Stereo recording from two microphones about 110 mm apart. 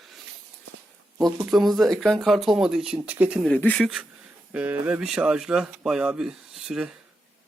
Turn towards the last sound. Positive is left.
turn(degrees=-5)  # may be behind; listen again after turning